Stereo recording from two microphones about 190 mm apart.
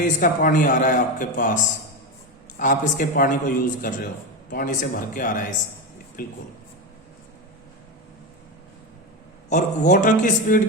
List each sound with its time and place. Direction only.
0.0 s a man's voice: 45° left (ahead or behind)
9.5 s a man's voice: 40° left (ahead or behind)